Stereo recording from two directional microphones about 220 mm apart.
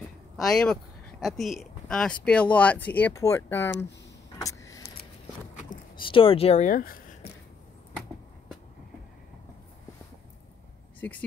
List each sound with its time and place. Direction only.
0.4 s speech: centre (ahead or behind)
4.4 s vehicle: 15° left (ahead or behind)
5.9 s speech: 25° left (ahead or behind); by 7.3 s 40° left (ahead or behind)
11.0 s speech: 5° left (ahead or behind)